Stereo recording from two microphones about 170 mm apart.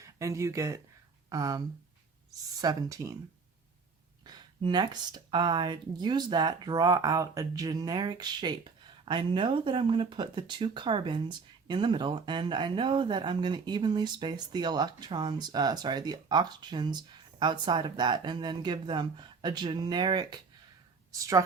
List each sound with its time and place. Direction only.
0.0 s speech: 15° right (ahead or behind)
4.3 s a woman's voice: 25° right (ahead or behind)